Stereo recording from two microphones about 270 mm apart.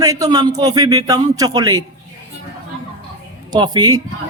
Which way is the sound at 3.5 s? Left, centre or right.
Centre.